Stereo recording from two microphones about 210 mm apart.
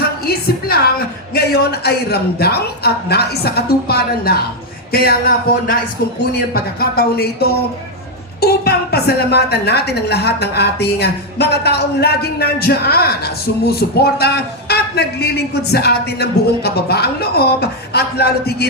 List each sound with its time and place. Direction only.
0.3 s a woman's voice: 45° left (ahead or behind)